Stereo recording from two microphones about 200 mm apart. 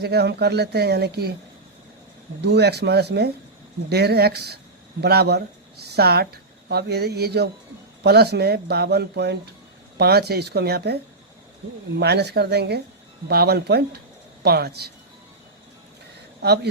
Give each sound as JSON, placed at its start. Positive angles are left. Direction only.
{"t": 0.0, "sound": "speech", "side_deg": -55}
{"t": 2.4, "sound": "speech", "side_deg": -55}